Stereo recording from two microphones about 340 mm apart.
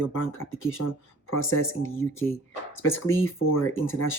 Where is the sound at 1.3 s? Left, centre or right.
Left.